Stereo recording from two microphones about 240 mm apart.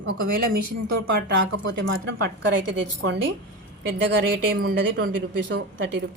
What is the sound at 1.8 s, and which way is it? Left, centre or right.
Speech, right.